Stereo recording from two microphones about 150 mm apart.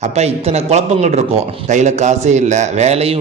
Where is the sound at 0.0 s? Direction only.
45° right (ahead or behind).